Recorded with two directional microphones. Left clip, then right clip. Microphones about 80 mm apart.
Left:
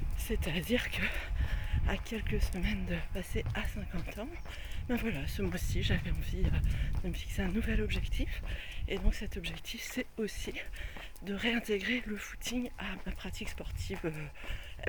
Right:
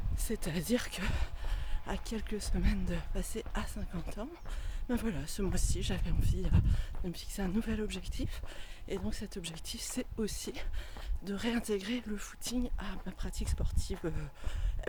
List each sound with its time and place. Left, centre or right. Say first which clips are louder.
0.3 s speech: left 1 dB; right
1.1 s a sound: left 4 dB; right
2.0 s speech: left 1 dB; right
6.5 s speech: right 1 dB; right
8.9 s speech: left 1 dB; right
9.2 s speech: left 2 dB; right
10.0 s speech: even; right
11.3 s speech: left 2 dB; right